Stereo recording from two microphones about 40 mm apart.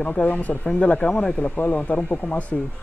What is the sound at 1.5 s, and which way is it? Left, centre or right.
Speech, left.